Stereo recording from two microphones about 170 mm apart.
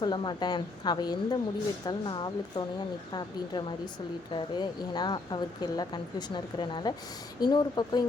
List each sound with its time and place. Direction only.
0.0 s speech: 25° left (ahead or behind)